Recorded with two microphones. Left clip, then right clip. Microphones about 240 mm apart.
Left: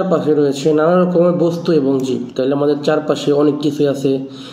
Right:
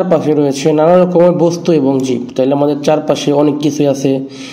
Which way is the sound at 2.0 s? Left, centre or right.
Right.